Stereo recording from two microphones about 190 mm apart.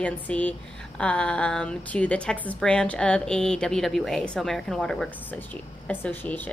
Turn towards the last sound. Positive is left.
turn(degrees=10)  # may be behind; listen again after turning